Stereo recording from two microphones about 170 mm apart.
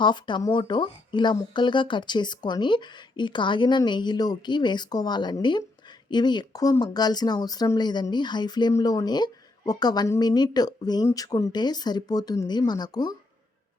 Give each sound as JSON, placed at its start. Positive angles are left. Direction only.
{"t": 0.0, "sound": "speech", "side_deg": 25}